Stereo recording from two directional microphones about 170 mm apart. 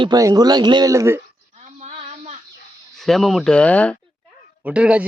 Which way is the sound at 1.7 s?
40° right (ahead or behind).